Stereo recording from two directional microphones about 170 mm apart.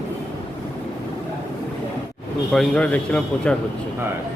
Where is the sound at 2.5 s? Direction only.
5° left (ahead or behind).